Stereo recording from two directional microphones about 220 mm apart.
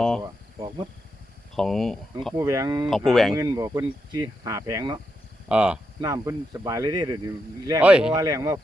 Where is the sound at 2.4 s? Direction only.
15° right (ahead or behind).